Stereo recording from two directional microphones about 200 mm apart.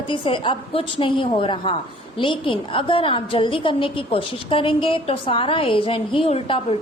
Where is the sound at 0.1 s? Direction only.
25° left (ahead or behind).